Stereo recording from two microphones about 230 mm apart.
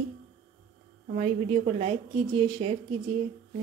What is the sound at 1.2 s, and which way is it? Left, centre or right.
A woman's voice, right.